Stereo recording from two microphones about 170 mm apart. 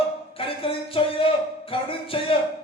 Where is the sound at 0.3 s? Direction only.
30° left (ahead or behind).